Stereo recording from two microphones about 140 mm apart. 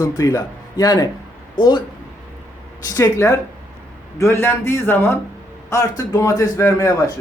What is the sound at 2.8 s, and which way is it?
A man's voice, 25° left (ahead or behind).